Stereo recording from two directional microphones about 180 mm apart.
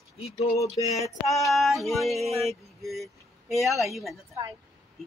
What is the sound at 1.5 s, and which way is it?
Vehicle, centre (ahead or behind).